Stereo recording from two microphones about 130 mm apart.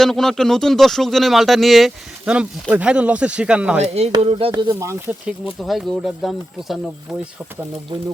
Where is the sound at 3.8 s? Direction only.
55° right (ahead or behind).